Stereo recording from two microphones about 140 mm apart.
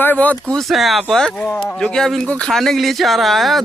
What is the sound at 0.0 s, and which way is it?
Speech, 10° left (ahead or behind).